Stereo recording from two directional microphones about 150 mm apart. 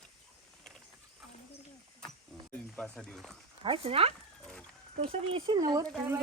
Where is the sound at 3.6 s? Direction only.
35° right (ahead or behind).